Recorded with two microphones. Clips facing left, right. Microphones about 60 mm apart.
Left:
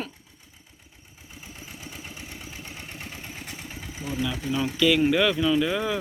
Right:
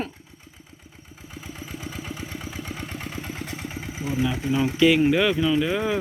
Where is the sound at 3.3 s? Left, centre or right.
Right.